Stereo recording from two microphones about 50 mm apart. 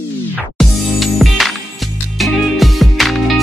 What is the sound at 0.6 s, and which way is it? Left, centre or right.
Music, centre.